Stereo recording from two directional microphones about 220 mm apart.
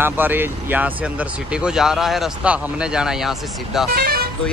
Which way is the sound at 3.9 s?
45° right (ahead or behind).